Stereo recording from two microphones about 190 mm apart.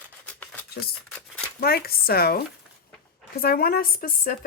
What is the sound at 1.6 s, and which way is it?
Speech, 55° left (ahead or behind).